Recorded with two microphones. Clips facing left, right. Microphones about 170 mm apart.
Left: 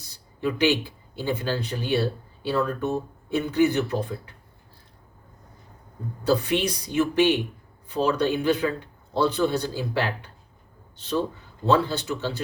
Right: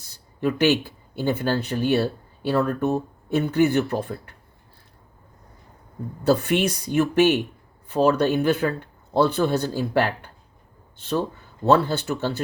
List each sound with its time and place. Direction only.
0.3 s speech: 55° right (ahead or behind)
6.2 s speech: 60° right (ahead or behind)
11.6 s speech: 60° right (ahead or behind)